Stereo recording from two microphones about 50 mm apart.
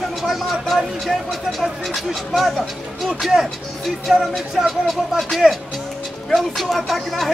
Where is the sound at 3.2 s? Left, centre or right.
Centre.